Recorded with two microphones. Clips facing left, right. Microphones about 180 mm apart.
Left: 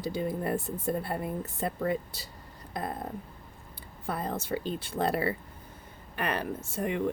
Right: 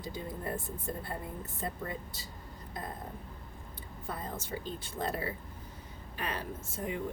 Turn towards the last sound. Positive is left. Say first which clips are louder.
# left 7 dB
turn(degrees=70)  # may be behind; listen again after turning